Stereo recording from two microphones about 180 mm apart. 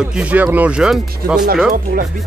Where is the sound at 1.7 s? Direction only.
50° right (ahead or behind).